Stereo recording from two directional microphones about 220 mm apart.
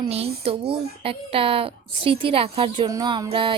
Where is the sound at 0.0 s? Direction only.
25° right (ahead or behind).